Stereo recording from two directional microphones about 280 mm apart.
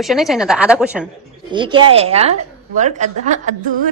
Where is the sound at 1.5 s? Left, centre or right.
Centre.